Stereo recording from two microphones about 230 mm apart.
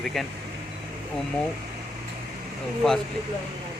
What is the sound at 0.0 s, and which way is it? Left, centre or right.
Speech, centre.